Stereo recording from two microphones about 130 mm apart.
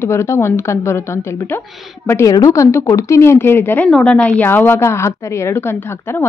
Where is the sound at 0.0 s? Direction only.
20° left (ahead or behind).